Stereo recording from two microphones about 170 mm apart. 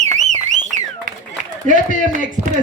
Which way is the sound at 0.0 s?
45° right (ahead or behind).